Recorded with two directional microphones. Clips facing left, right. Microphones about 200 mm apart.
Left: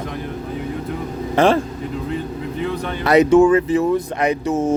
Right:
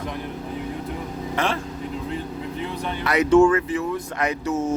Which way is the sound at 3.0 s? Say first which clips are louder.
Left 9 dB; 35° left (ahead or behind).